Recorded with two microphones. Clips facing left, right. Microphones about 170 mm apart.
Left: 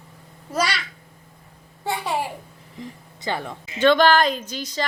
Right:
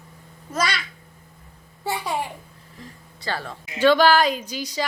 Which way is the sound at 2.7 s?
20° left (ahead or behind).